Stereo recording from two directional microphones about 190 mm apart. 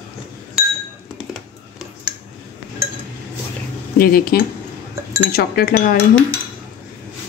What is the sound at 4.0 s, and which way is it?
Speech, 50° left (ahead or behind).